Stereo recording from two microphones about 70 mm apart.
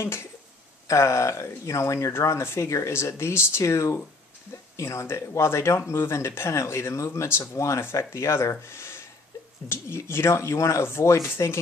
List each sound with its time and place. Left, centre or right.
0.0 s speech: left